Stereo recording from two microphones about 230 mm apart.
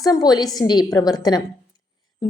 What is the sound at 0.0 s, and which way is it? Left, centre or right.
A woman's voice, centre.